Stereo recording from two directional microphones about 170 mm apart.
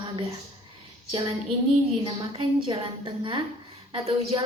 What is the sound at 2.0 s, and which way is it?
A woman's voice, 30° right (ahead or behind).